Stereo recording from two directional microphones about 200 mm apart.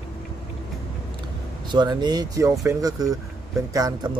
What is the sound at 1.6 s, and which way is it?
Speech, 20° right (ahead or behind).